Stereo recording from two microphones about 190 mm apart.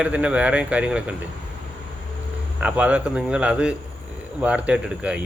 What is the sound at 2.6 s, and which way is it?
Speech, 5° right (ahead or behind).